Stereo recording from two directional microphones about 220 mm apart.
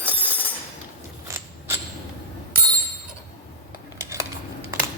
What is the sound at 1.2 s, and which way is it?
Mechanisms, 15° right (ahead or behind).